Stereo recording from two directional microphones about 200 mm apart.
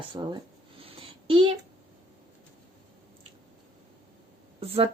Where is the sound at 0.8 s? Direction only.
25° right (ahead or behind).